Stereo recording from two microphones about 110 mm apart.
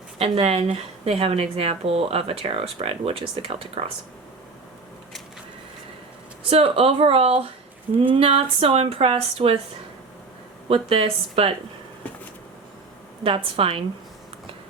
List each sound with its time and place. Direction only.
0.2 s speech: 60° right (ahead or behind)
6.5 s speech: 60° right (ahead or behind)
10.7 s speech: 60° right (ahead or behind)
13.2 s speech: 55° right (ahead or behind)